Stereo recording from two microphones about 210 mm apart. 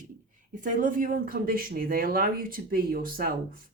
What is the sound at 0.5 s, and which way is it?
Speech, 40° right (ahead or behind).